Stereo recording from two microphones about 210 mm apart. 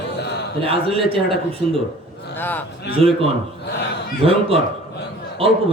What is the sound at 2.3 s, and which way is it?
Speech, 10° left (ahead or behind).